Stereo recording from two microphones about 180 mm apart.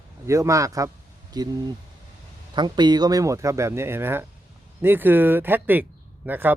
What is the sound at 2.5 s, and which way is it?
Speech, 25° right (ahead or behind).